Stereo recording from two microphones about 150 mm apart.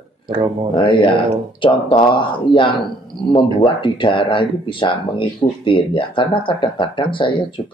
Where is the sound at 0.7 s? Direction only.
35° left (ahead or behind).